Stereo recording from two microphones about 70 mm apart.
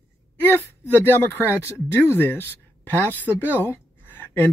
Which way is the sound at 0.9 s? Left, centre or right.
Left.